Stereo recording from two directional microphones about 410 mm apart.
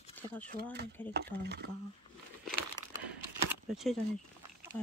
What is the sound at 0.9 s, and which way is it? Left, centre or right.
Speech, centre.